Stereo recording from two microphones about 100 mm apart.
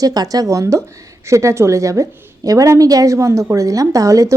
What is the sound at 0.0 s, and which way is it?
A woman's voice, 40° right (ahead or behind).